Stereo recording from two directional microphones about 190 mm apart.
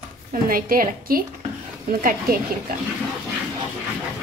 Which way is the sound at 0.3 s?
50° right (ahead or behind).